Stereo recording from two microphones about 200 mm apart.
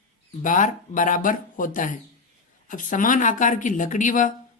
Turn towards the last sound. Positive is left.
turn(degrees=40)  # may be behind; listen again after turning